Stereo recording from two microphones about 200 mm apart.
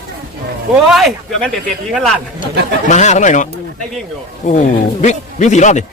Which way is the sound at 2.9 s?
35° left (ahead or behind).